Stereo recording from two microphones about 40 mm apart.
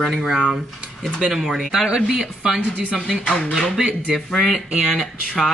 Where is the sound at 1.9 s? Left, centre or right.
Centre.